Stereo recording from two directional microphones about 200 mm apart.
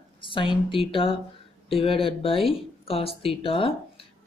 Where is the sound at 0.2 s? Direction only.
25° left (ahead or behind).